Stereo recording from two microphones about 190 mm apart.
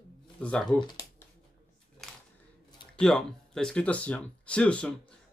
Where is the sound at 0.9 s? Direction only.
20° left (ahead or behind).